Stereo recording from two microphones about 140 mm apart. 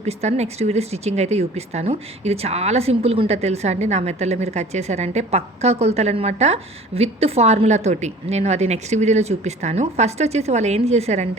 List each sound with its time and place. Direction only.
0.0 s speech: 50° right (ahead or behind)